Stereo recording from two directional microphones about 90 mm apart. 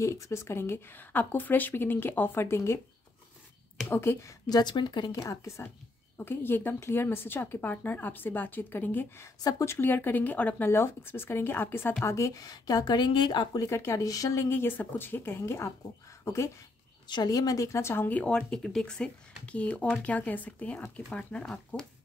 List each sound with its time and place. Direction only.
0.0 s speech: 30° left (ahead or behind)
3.9 s speech: 25° left (ahead or behind)
4.5 s speech: 50° left (ahead or behind)
5.2 s a woman's voice: 35° left (ahead or behind)
6.1 s speech: 25° left (ahead or behind)
9.4 s a woman's voice: 45° left (ahead or behind)
9.7 s a woman's voice: 20° left (ahead or behind); by 13.6 s 60° left (ahead or behind)
13.6 s speech: 30° left (ahead or behind)
17.1 s a woman's voice: 45° left (ahead or behind)
18.0 s speech: 15° left (ahead or behind)